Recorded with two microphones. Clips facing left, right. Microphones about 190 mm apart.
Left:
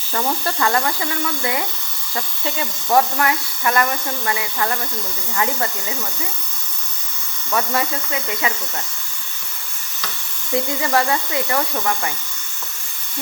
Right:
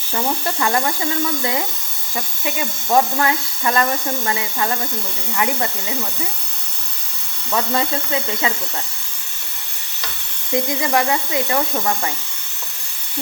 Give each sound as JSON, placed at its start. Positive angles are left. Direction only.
{"t": 0.1, "sound": "sizzle", "side_deg": -15}
{"t": 1.4, "sound": "speech", "side_deg": -25}
{"t": 5.4, "sound": "sizzle", "side_deg": -15}
{"t": 7.5, "sound": "speech", "side_deg": -25}
{"t": 10.5, "sound": "speech", "side_deg": -15}